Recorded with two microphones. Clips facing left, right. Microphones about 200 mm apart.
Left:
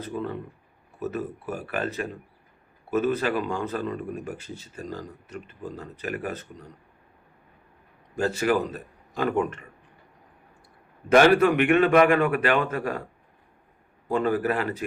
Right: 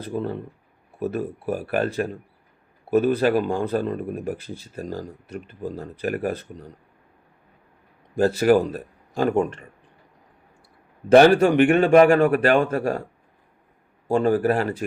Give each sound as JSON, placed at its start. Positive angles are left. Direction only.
{"t": 0.0, "sound": "speech", "side_deg": -35}
{"t": 2.9, "sound": "speech", "side_deg": -35}
{"t": 8.1, "sound": "speech", "side_deg": -35}
{"t": 11.1, "sound": "speech", "side_deg": -30}
{"t": 14.1, "sound": "speech", "side_deg": -30}